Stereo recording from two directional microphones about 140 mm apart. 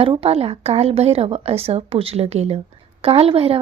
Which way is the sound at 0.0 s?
40° right (ahead or behind).